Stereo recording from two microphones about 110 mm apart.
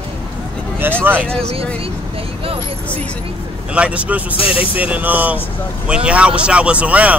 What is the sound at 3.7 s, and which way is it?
Speech, 10° right (ahead or behind).